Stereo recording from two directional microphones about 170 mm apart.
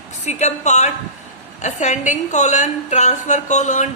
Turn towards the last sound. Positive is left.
turn(degrees=45)  # may be behind; listen again after turning